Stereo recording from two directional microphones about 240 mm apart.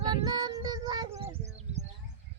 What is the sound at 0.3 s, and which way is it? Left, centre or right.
Child singing, centre.